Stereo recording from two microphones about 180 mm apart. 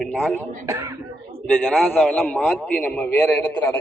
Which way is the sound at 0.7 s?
15° right (ahead or behind).